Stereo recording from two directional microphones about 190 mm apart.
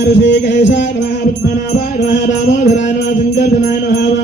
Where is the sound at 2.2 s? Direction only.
40° left (ahead or behind).